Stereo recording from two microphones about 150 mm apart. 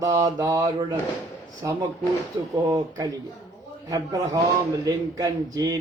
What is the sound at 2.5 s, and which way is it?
A man's voice, 25° right (ahead or behind).